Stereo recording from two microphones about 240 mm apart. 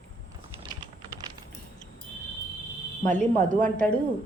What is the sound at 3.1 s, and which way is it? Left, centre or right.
Speech, centre.